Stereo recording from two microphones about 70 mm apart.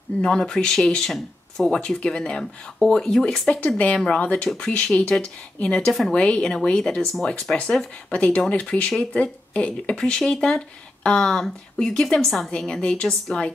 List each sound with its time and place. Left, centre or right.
0.2 s speech: centre
3.4 s speech: centre
5.9 s a woman's voice: centre
6.1 s speech: centre